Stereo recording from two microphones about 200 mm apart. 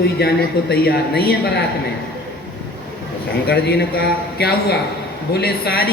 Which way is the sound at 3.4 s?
55° left (ahead or behind).